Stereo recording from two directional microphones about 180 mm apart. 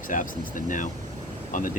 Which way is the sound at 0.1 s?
45° left (ahead or behind).